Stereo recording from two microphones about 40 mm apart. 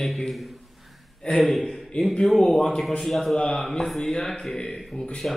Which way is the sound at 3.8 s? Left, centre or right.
Centre.